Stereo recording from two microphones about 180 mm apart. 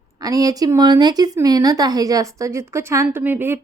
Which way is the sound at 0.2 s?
20° right (ahead or behind).